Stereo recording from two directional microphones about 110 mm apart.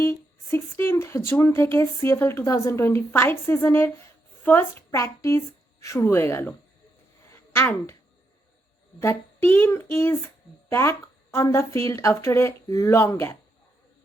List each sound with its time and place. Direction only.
0.0 s speech: 20° left (ahead or behind)
7.3 s a sound: 20° left (ahead or behind)
9.0 s speech: 25° left (ahead or behind)